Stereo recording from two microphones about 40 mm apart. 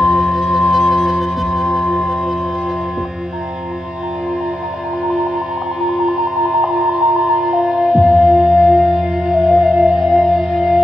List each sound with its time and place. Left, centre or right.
0.0 s music: centre
5.8 s music: centre
10.0 s music: centre